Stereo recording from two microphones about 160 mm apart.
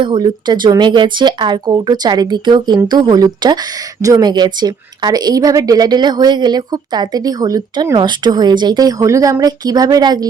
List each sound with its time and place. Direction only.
0.0 s a woman's voice: 30° right (ahead or behind)